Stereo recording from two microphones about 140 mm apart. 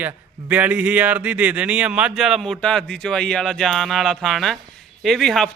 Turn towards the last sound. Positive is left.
turn(degrees=5)  # may be behind; listen again after turning